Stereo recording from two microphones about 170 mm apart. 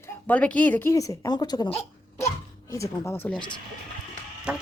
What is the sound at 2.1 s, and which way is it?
Hiccup, 15° left (ahead or behind).